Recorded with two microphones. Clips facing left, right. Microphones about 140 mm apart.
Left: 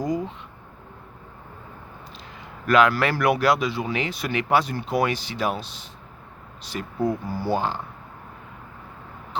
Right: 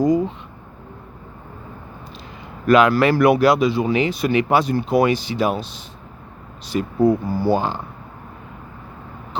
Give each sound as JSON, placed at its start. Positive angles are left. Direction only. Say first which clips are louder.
{"t": 2.6, "sound": "speech", "louder": "right 5 dB", "side_deg": -20}
{"t": 6.7, "sound": "speech", "louder": "right 8 dB", "side_deg": -20}